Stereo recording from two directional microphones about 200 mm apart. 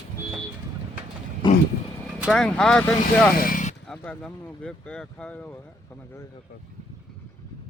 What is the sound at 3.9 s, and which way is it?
Speech, 5° left (ahead or behind).